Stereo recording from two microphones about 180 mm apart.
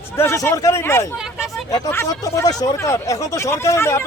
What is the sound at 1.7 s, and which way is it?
A man's voice, 15° left (ahead or behind).